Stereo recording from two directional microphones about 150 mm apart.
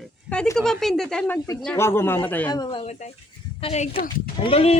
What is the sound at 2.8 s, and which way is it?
Speech, 45° left (ahead or behind).